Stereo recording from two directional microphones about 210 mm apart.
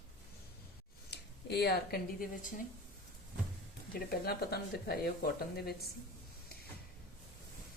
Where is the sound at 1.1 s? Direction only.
50° left (ahead or behind).